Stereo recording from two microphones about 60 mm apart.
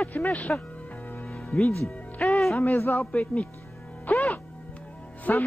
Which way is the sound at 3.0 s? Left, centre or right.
Left.